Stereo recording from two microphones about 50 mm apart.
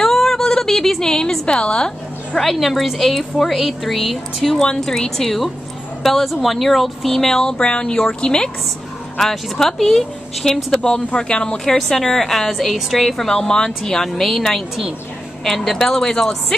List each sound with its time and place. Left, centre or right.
0.0 s a sound: centre
2.3 s a woman's voice: centre
4.6 s a woman's voice: centre